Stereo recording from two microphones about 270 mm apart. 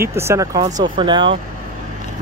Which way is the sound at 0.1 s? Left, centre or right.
Centre.